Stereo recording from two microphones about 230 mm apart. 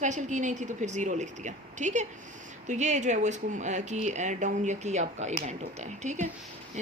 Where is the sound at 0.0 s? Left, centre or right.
Right.